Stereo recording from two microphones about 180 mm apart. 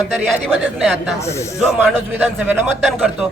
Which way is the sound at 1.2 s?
15° left (ahead or behind).